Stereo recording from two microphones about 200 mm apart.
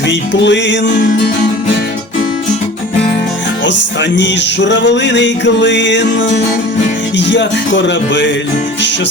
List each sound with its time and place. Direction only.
0.1 s music: 65° left (ahead or behind)
3.7 s music: 65° left (ahead or behind)